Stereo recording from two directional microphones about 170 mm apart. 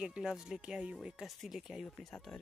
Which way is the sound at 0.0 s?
5° right (ahead or behind).